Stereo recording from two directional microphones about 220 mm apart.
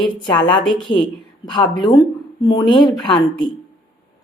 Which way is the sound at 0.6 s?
Centre (ahead or behind).